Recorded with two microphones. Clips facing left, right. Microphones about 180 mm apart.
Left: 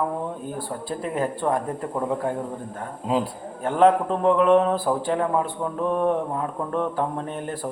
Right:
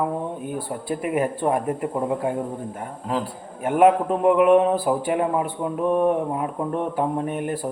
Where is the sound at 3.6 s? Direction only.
15° right (ahead or behind).